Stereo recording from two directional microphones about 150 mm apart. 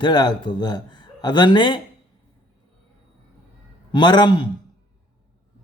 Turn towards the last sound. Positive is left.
turn(degrees=30)  # may be behind; listen again after turning